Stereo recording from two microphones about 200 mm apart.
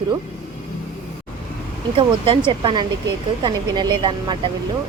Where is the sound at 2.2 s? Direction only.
25° right (ahead or behind).